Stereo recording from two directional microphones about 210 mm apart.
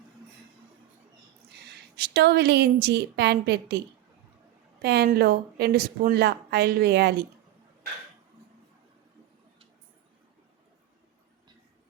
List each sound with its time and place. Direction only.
1.7 s a woman's voice: 50° right (ahead or behind)
4.8 s speech: 50° right (ahead or behind)